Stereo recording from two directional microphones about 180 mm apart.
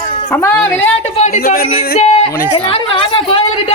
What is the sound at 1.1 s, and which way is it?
Speech, 40° left (ahead or behind).